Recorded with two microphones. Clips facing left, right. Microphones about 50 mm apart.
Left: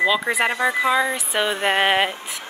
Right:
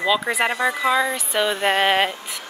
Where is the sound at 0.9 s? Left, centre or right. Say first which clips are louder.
Even; centre.